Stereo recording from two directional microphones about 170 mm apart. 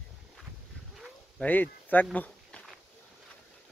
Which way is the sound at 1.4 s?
10° left (ahead or behind).